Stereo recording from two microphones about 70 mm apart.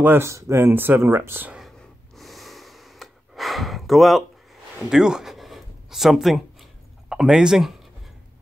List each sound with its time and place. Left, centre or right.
0.0 s speech: right
0.3 s speech: right
2.1 s gasp: centre
4.7 s a sound: centre